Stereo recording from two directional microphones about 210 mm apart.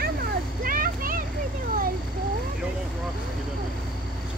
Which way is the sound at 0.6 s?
45° right (ahead or behind).